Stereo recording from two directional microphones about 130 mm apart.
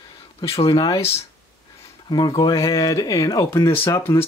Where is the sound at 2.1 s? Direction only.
30° left (ahead or behind).